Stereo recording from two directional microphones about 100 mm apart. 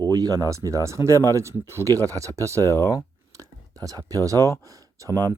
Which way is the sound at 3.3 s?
35° right (ahead or behind).